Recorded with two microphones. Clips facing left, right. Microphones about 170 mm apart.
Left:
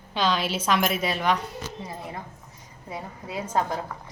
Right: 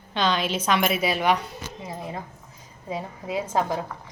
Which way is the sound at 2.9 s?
20° right (ahead or behind).